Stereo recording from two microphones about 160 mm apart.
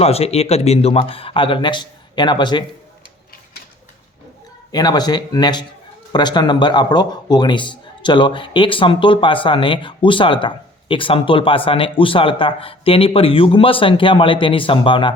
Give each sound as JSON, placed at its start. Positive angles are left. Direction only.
{"t": 0.0, "sound": "a man's voice", "side_deg": 40}
{"t": 4.7, "sound": "a man's voice", "side_deg": 25}